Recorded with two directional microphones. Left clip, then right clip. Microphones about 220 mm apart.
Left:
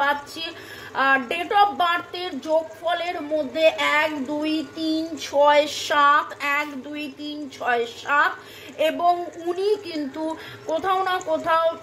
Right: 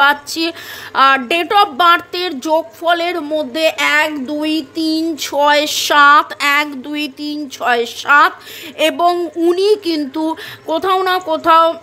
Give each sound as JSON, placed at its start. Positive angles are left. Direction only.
{"t": 0.0, "sound": "speech", "side_deg": -50}